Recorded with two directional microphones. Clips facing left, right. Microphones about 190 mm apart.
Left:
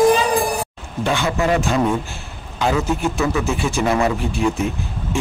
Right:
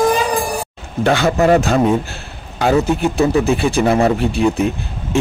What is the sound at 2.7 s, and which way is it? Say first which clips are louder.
Speech: right 6 dB; 35° right (ahead or behind).